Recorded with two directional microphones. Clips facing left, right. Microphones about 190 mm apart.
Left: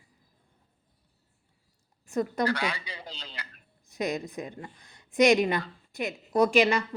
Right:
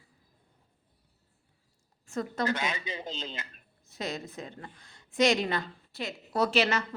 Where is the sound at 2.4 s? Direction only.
20° right (ahead or behind).